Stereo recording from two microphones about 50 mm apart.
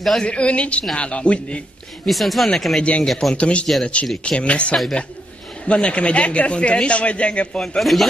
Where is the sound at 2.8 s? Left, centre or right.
Left.